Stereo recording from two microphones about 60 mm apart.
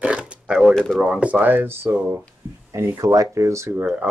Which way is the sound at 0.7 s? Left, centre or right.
Centre.